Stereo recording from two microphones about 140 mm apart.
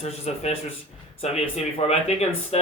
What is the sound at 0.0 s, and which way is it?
Speech, 50° left (ahead or behind).